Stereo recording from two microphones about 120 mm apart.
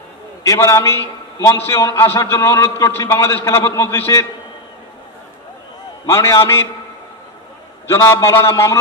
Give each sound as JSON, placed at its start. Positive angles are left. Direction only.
{"t": 0.4, "sound": "a man's voice", "side_deg": 25}
{"t": 6.0, "sound": "a man's voice", "side_deg": 20}
{"t": 7.8, "sound": "a man's voice", "side_deg": 20}